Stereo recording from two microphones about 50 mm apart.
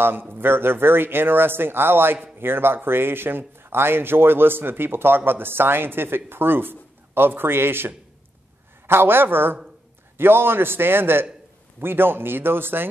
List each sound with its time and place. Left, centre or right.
0.0 s a man's voice: right